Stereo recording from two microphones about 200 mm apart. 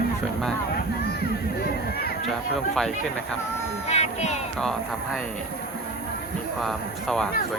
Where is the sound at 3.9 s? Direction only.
35° left (ahead or behind).